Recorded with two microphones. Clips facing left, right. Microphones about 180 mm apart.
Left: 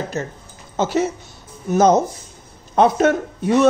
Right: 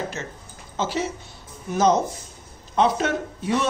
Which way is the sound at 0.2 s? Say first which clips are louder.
Left 8 dB; 35° left (ahead or behind).